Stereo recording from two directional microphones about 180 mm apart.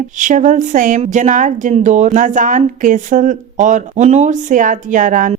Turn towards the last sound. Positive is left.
turn(degrees=-45)  # may be behind; listen again after turning